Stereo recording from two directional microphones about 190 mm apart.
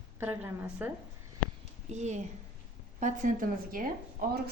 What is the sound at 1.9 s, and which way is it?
A woman's voice, 40° right (ahead or behind).